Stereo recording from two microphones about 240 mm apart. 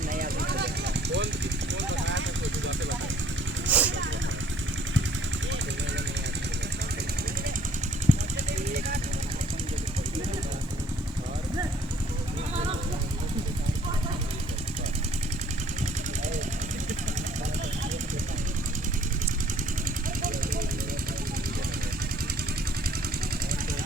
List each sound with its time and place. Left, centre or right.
0.1 s a sound: right
1.9 s vehicle: right
3.7 s vehicle: centre
8.1 s vehicle: right